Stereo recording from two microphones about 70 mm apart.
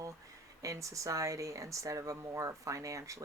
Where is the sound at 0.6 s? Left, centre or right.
Right.